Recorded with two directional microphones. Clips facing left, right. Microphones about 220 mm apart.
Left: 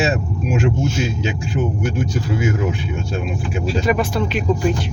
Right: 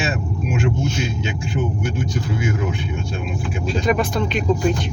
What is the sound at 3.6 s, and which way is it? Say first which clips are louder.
Speech: left 1 dB; 5° left (ahead or behind).